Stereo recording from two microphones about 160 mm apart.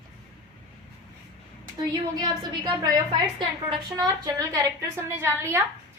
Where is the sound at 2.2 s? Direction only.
25° right (ahead or behind).